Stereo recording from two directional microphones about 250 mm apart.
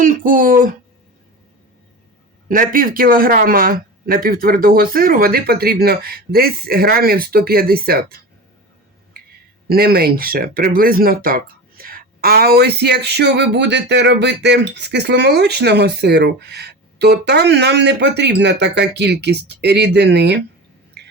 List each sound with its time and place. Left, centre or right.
0.0 s a sound: right
2.5 s speech: right
9.6 s speech: right